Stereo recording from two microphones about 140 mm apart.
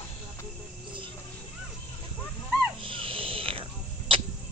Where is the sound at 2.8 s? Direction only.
40° right (ahead or behind).